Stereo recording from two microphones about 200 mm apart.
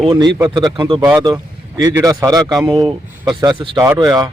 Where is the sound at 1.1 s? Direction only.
10° right (ahead or behind).